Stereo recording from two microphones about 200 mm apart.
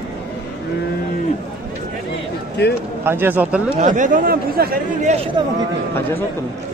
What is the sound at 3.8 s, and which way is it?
Speech, 40° right (ahead or behind).